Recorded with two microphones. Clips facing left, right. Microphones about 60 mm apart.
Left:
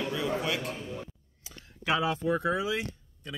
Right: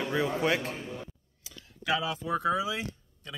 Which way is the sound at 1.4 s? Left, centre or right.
Left.